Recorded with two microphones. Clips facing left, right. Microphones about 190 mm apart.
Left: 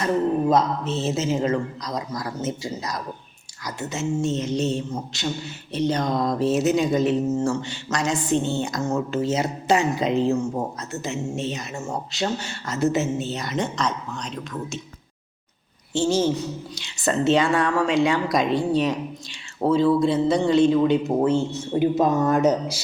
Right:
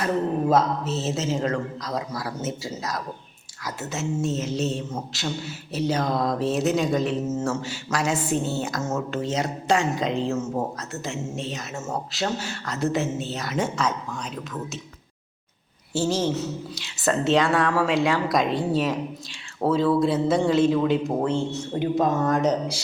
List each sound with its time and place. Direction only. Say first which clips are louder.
0.0 s speech: left 2 dB; 5° right (ahead or behind)
15.9 s speech: left 3 dB; 5° right (ahead or behind)